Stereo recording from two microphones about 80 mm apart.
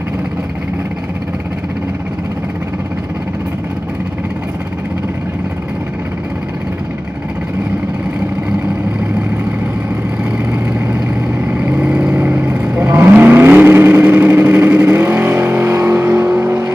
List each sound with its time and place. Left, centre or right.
11.4 s vehicle: centre